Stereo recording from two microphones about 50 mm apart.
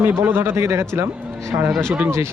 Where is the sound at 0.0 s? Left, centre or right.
Right.